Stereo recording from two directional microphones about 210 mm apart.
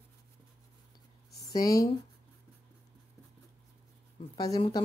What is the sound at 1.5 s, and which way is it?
Speech, 15° left (ahead or behind).